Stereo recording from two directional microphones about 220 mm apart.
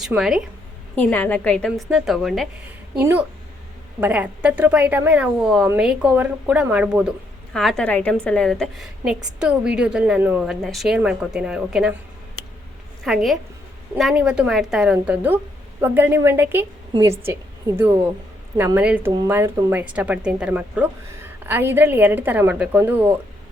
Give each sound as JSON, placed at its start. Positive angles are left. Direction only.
{"t": 0.0, "sound": "a woman's voice", "side_deg": 0}
{"t": 0.9, "sound": "a woman's voice", "side_deg": 5}
{"t": 3.0, "sound": "a woman's voice", "side_deg": -10}
{"t": 13.1, "sound": "a woman's voice", "side_deg": 0}